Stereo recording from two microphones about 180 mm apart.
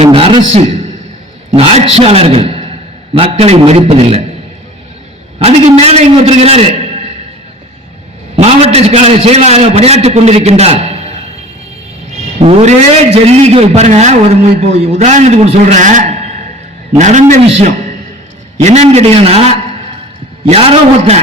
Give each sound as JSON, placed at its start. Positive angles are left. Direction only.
{"t": 0.0, "sound": "a sound", "side_deg": -30}
{"t": 1.5, "sound": "a man's voice", "side_deg": -35}
{"t": 5.4, "sound": "a man's voice", "side_deg": -35}
{"t": 8.4, "sound": "a man's voice", "side_deg": -35}
{"t": 12.4, "sound": "a man's voice", "side_deg": -35}